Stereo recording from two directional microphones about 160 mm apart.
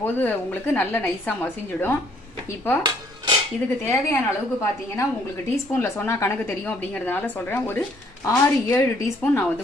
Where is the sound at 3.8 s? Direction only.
15° left (ahead or behind).